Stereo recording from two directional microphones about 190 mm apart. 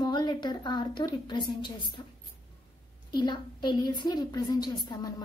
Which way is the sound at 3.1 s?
25° left (ahead or behind).